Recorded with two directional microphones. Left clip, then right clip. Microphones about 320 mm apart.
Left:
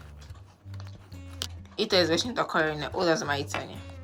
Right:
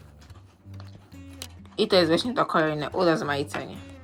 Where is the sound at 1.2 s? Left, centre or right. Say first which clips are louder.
Left 5 dB; centre.